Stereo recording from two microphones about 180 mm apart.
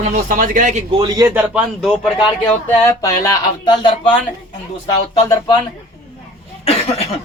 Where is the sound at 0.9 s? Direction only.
25° right (ahead or behind).